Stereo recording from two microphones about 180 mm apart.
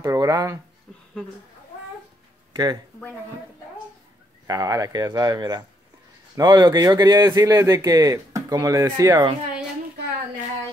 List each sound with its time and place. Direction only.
0.0 s speech: 20° right (ahead or behind)
2.5 s speech: 25° right (ahead or behind)
4.5 s speech: 20° right (ahead or behind)